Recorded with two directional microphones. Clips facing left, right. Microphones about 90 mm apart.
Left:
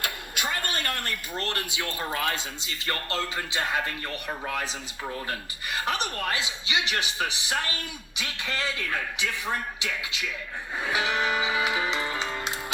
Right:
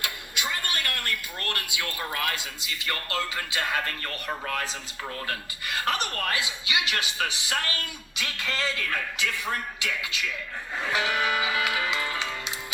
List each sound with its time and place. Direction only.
0.0 s a sound: 40° left (ahead or behind)
0.7 s speech: 30° left (ahead or behind)
10.8 s music: 20° left (ahead or behind); by 12.5 s 35° left (ahead or behind)